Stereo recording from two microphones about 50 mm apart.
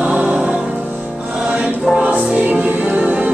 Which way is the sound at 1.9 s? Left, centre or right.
Right.